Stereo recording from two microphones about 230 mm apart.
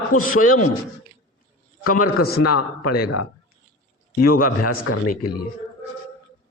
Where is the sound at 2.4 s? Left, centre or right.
Left.